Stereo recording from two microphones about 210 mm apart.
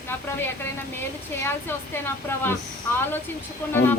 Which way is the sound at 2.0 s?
10° left (ahead or behind).